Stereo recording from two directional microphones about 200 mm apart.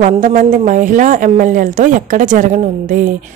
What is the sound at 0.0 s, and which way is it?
Speech, 40° right (ahead or behind).